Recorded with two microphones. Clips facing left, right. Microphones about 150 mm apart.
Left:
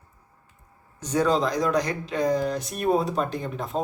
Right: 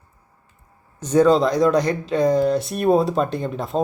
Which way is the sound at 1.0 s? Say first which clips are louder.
Right 7 dB; 30° right (ahead or behind).